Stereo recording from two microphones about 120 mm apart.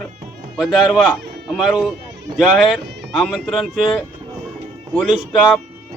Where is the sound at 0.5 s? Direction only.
Centre (ahead or behind).